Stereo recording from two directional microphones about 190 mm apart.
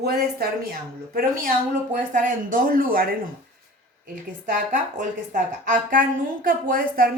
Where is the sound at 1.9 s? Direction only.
45° right (ahead or behind).